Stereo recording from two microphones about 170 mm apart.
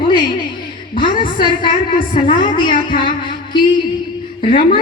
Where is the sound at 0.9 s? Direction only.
30° left (ahead or behind).